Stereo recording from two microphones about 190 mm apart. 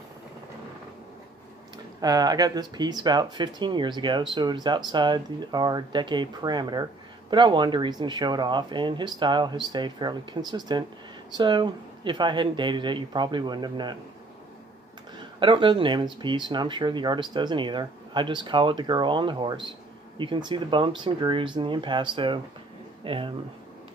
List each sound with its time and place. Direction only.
2.0 s speech: 20° right (ahead or behind)
15.1 s speech: 25° right (ahead or behind)